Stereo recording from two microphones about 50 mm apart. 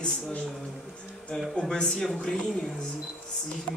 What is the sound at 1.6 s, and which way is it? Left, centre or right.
Speech, centre.